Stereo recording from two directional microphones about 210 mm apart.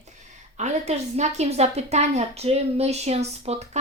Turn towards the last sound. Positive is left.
turn(degrees=-30)  # may be behind; listen again after turning